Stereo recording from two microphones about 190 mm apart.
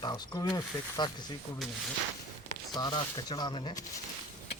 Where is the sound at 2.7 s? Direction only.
20° left (ahead or behind).